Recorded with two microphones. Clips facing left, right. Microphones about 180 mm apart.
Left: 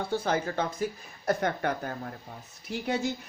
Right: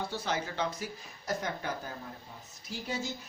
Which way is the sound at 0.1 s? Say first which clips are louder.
Left 6 dB; 50° left (ahead or behind).